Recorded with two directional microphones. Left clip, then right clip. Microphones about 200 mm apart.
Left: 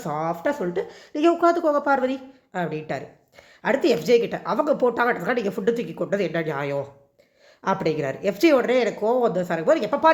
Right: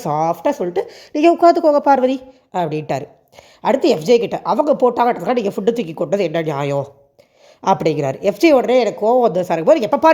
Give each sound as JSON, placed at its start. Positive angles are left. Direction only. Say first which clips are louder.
{"t": 0.0, "sound": "a woman's voice", "louder": "right 8 dB", "side_deg": -35}